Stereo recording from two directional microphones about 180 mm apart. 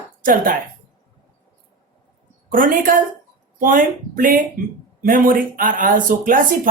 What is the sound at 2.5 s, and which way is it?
Speech, 50° right (ahead or behind).